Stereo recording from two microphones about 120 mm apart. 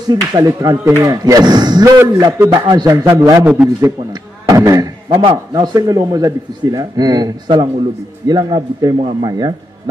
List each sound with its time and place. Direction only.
0.1 s a man's voice: 30° right (ahead or behind)
1.9 s a man's voice: 25° right (ahead or behind)
3.4 s a man's voice: 15° right (ahead or behind)
4.1 s speech: 30° right (ahead or behind)
5.2 s a man's voice: 35° right (ahead or behind)